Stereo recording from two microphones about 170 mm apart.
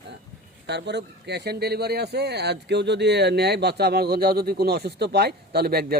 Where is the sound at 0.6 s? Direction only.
90° right.